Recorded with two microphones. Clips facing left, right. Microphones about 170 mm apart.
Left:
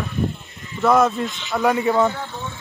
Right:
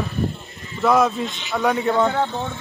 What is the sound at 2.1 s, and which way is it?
Speech, 70° right (ahead or behind).